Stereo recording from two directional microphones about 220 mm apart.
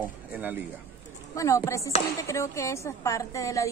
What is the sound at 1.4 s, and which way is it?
A woman's voice, 15° left (ahead or behind).